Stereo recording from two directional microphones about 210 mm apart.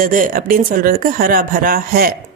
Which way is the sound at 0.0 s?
40° right (ahead or behind).